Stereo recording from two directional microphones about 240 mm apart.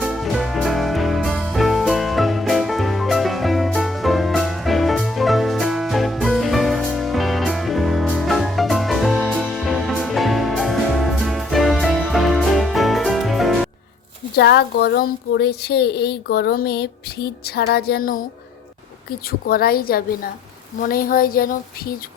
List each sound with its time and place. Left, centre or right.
0.0 s music: centre
14.3 s a woman's voice: left
19.5 s a woman's voice: left